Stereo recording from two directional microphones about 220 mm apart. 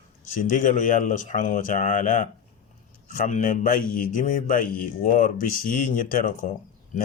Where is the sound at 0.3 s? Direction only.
35° left (ahead or behind).